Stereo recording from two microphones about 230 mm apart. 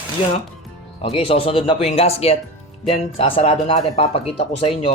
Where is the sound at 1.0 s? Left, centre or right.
Left.